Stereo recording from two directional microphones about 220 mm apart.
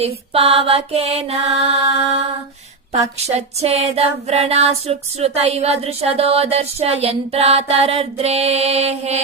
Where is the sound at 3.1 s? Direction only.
30° right (ahead or behind).